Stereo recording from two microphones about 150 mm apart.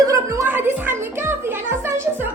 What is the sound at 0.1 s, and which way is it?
Music, 20° right (ahead or behind).